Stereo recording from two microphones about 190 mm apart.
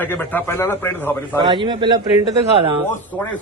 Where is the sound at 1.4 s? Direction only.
25° right (ahead or behind).